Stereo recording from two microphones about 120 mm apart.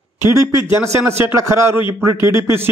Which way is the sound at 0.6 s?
25° right (ahead or behind).